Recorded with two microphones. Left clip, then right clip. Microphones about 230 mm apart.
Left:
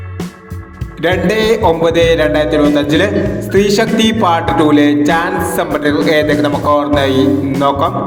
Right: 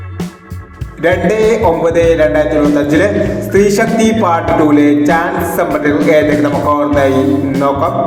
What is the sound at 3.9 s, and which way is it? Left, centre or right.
Music, left.